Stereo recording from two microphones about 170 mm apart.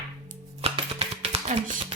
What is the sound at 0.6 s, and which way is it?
Music, 35° right (ahead or behind).